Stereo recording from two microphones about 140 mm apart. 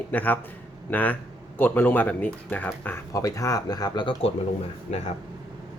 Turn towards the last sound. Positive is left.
turn(degrees=60)  # may be behind; listen again after turning